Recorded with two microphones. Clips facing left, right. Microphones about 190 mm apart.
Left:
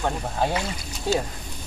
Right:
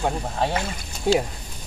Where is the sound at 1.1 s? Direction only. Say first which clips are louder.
Right 4 dB; 15° right (ahead or behind).